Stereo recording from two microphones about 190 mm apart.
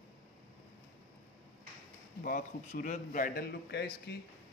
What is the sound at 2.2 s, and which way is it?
A man's voice, 50° left (ahead or behind).